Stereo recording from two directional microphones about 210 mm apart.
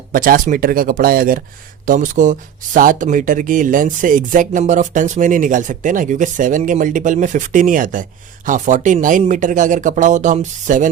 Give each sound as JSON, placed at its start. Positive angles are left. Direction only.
{"t": 0.1, "sound": "speech", "side_deg": -40}